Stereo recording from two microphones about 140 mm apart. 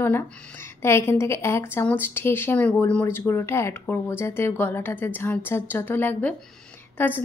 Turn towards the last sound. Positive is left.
turn(degrees=15)  # may be behind; listen again after turning